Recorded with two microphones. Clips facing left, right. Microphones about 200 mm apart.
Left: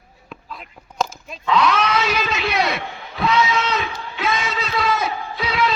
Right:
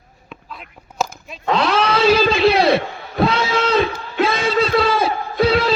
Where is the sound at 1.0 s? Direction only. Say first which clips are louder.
Right 1 dB; 5° right (ahead or behind).